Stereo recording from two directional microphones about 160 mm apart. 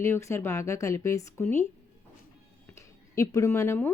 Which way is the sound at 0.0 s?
15° left (ahead or behind).